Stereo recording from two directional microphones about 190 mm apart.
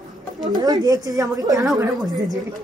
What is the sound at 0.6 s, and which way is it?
A woman's voice, 20° right (ahead or behind).